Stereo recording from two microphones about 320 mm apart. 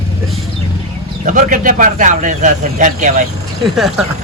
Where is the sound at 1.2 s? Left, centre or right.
Right.